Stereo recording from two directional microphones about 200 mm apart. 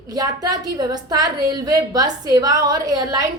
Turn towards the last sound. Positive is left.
turn(degrees=-20)  # may be behind; listen again after turning